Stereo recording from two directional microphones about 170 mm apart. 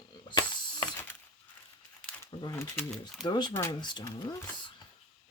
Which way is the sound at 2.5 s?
15° left (ahead or behind).